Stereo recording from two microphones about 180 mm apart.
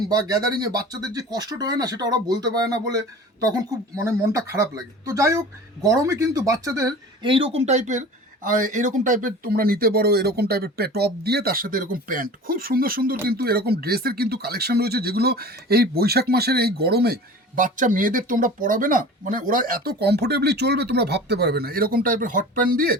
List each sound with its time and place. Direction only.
0.1 s speech: 20° right (ahead or behind)
4.0 s speech: 15° right (ahead or behind); by 23.0 s 55° right (ahead or behind)